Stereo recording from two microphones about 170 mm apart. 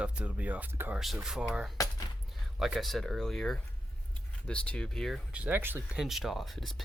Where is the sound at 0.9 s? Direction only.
Centre (ahead or behind).